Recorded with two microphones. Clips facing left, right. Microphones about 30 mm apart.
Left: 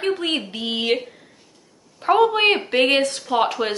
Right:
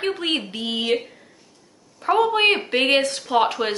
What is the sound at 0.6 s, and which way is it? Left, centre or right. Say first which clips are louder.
Speech: left 1 dB; centre.